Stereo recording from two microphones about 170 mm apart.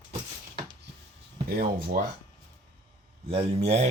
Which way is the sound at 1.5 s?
60° right (ahead or behind).